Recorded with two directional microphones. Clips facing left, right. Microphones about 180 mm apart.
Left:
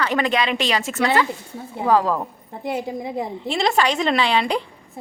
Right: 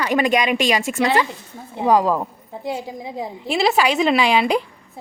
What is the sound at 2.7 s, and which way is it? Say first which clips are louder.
Speech: left 3 dB; 55° left (ahead or behind).